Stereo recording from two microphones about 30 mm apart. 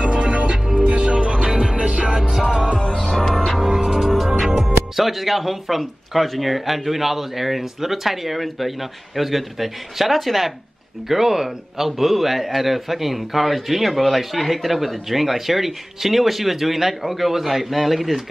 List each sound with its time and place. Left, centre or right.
0.0 s music: right
2.9 s music: left
3.6 s music: right
4.6 s a man's voice: centre